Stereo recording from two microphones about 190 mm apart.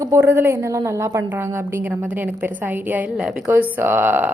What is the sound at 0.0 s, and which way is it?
A woman's voice, 15° right (ahead or behind).